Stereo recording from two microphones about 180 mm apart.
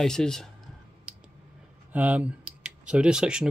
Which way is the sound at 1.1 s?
5° right (ahead or behind).